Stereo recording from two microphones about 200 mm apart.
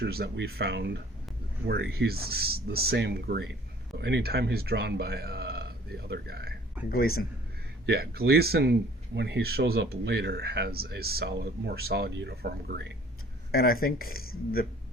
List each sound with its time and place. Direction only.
0.0 s speech: 50° right (ahead or behind)
6.8 s a man's voice: 10° right (ahead or behind)
7.9 s speech: 50° right (ahead or behind)
13.5 s speech: 50° left (ahead or behind)